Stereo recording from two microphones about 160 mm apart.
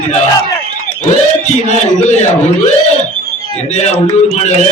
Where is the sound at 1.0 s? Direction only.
45° left (ahead or behind).